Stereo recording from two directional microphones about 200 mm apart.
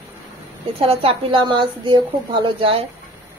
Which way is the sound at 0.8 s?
30° right (ahead or behind).